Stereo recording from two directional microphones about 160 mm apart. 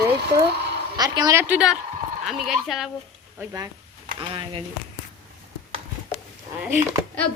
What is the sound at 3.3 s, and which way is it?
Speech, 20° right (ahead or behind).